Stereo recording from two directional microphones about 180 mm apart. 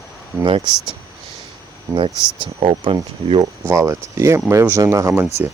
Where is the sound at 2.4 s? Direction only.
30° right (ahead or behind).